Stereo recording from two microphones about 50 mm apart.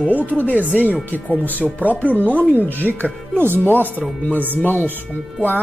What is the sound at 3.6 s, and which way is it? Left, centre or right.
Speech, left.